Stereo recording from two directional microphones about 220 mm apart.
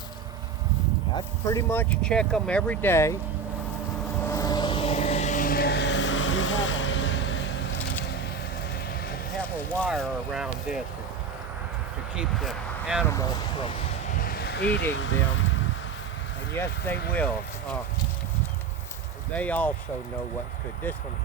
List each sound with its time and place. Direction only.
1.1 s speech: 15° left (ahead or behind)
4.3 s vehicle: 15° left (ahead or behind); by 7.6 s 55° left (ahead or behind)
9.8 s speech: 5° right (ahead or behind)
12.1 s speech: centre (ahead or behind)
14.2 s vehicle: 40° left (ahead or behind); by 15.5 s 60° left (ahead or behind)
16.6 s speech: 10° left (ahead or behind)
19.3 s speech: 5° left (ahead or behind)